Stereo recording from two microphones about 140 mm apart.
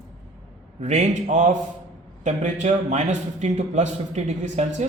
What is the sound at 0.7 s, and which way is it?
A man's voice, 55° right (ahead or behind).